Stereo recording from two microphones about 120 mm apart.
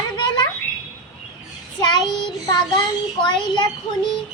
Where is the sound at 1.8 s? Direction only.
35° left (ahead or behind).